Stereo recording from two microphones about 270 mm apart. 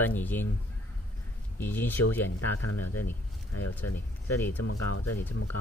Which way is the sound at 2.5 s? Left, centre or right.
Left.